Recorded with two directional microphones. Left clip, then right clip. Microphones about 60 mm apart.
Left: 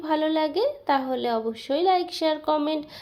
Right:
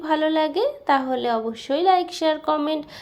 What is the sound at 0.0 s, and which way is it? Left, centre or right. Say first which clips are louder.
A woman's voice: right 3 dB; right.